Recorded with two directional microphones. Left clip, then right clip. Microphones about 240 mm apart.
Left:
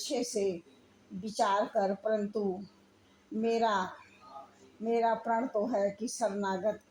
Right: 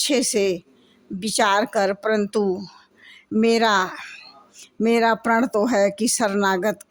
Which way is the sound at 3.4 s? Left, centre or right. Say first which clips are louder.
Right 11 dB; right.